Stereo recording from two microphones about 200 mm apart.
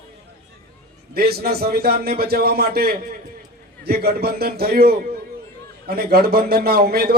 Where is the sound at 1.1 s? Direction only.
50° right (ahead or behind).